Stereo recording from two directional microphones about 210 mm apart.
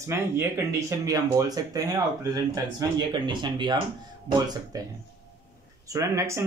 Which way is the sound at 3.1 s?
20° right (ahead or behind).